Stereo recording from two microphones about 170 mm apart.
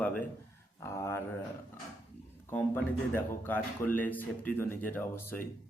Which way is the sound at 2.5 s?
10° left (ahead or behind).